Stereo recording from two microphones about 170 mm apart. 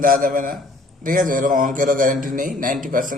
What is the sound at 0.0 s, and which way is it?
A man's voice, 55° right (ahead or behind).